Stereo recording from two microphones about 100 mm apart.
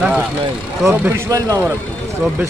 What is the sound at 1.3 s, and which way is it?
Speech, 35° right (ahead or behind).